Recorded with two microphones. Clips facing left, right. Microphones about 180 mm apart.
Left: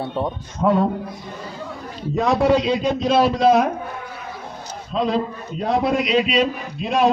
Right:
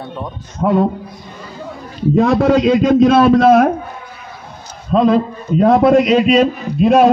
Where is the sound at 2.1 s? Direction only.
60° right (ahead or behind).